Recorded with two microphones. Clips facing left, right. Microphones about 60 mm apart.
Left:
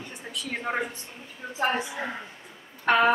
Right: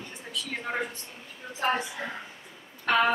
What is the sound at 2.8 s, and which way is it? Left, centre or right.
Speech, left.